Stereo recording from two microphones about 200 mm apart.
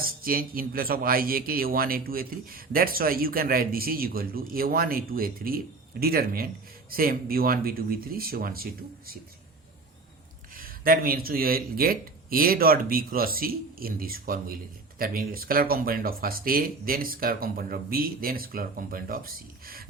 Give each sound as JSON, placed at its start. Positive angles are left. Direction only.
{"t": 0.0, "sound": "speech", "side_deg": -45}
{"t": 10.5, "sound": "speech", "side_deg": -45}